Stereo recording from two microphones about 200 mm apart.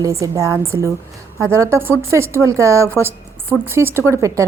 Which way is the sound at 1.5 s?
15° right (ahead or behind).